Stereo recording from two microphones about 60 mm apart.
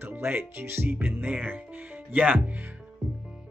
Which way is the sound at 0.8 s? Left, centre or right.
Right.